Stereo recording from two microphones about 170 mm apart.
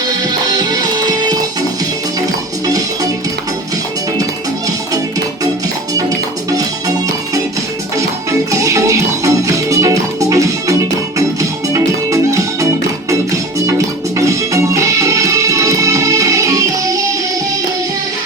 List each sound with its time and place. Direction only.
0.5 s music: 25° right (ahead or behind)
2.6 s music: 20° right (ahead or behind)
7.9 s music: 20° right (ahead or behind)